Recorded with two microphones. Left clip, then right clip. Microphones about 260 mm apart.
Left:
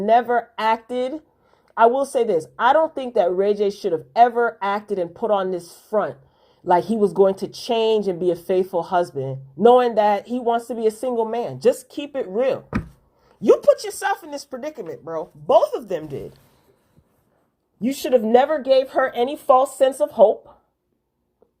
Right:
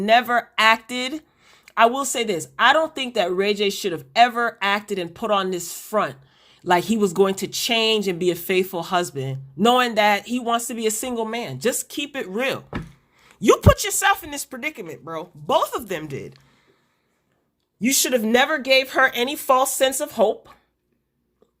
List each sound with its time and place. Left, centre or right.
0.1 s speech: right
1.6 s a sound: right
2.0 s speech: right
11.7 s speech: right
13.2 s a sound: right
13.7 s speech: right
15.5 s speech: right
17.7 s speech: right